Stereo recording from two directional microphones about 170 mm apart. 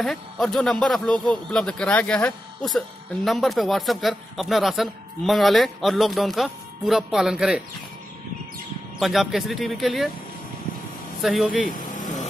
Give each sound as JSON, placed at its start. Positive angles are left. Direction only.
{"t": 0.0, "sound": "a man's voice", "side_deg": 0}
{"t": 9.0, "sound": "a man's voice", "side_deg": 0}
{"t": 11.1, "sound": "speech", "side_deg": 0}
{"t": 11.6, "sound": "vehicle", "side_deg": 50}